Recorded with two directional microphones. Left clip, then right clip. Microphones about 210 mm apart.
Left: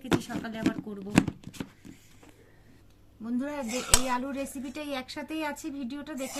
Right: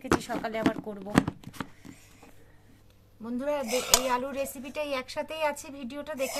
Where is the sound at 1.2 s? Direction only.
25° right (ahead or behind).